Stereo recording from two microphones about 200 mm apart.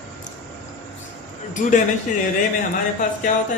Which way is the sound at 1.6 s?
45° left (ahead or behind).